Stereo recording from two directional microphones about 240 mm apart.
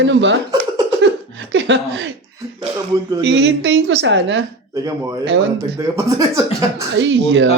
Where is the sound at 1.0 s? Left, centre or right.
Right.